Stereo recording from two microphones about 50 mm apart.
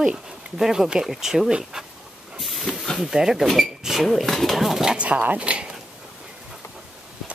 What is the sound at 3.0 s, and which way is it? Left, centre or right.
Speech, centre.